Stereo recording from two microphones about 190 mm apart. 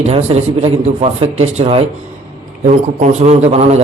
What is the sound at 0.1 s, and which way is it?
A man's voice, 35° right (ahead or behind).